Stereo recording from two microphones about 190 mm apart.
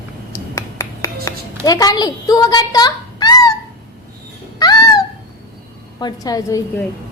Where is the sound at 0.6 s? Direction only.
15° left (ahead or behind).